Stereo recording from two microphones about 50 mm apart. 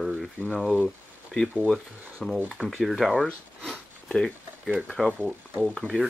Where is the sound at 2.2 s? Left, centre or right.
Centre.